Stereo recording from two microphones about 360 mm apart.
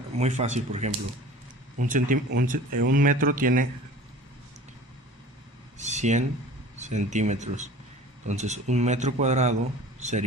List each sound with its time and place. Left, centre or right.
0.2 s speech: centre
1.9 s speech: right
5.7 s a sound: centre
6.7 s speech: centre